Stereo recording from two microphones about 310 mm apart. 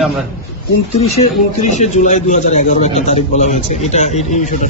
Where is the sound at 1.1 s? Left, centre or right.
Left.